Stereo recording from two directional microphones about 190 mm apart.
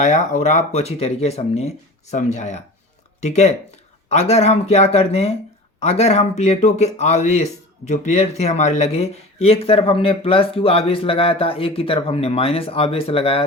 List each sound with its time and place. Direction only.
0.0 s speech: 40° left (ahead or behind)